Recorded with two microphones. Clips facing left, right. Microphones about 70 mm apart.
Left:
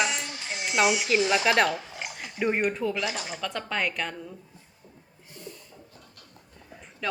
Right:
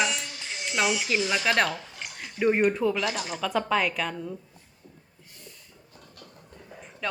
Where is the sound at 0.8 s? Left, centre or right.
Centre.